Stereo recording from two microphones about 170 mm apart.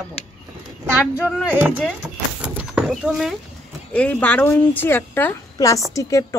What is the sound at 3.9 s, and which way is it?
Speech, 10° left (ahead or behind).